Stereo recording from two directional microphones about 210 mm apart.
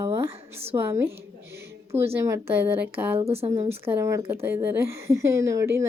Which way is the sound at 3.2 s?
30° right (ahead or behind).